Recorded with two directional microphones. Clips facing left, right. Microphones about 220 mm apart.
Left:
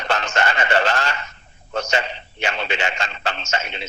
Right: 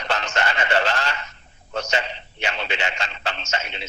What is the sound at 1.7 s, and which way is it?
A man's voice, 50° left (ahead or behind).